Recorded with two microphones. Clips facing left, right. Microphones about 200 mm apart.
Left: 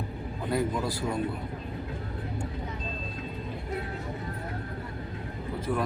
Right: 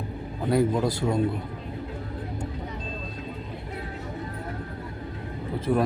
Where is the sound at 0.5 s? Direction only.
25° right (ahead or behind).